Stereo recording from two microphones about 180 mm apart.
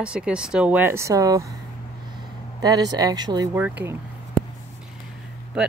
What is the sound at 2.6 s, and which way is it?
Speech, 20° right (ahead or behind).